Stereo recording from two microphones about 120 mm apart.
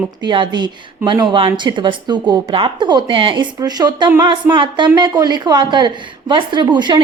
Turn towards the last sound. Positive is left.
turn(degrees=-40)  # may be behind; listen again after turning